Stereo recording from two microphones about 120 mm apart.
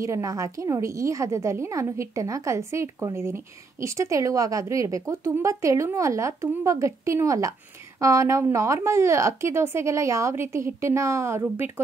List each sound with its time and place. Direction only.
0.0 s a woman's voice: 25° right (ahead or behind)